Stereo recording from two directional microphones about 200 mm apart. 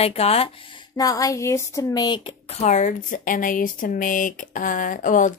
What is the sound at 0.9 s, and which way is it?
A woman's voice, 15° left (ahead or behind).